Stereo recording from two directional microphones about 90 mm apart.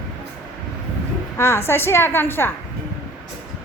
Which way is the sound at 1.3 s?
30° left (ahead or behind).